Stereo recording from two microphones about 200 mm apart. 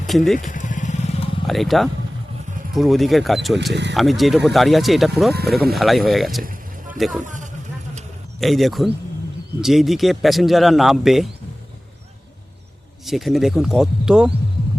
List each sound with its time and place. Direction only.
0.1 s speech: centre (ahead or behind)
0.3 s vehicle: 40° left (ahead or behind)
1.5 s speech: centre (ahead or behind)
6.4 s a sound: 45° right (ahead or behind)
7.3 s vehicle: 40° right (ahead or behind)
8.4 s speech: centre (ahead or behind)
13.1 s speech: centre (ahead or behind)